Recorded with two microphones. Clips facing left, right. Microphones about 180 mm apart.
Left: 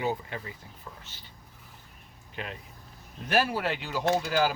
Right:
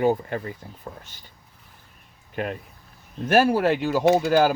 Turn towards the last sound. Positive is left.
turn(degrees=-50)  # may be behind; listen again after turning